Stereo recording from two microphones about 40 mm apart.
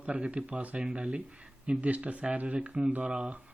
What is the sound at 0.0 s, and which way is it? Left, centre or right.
Speech, right.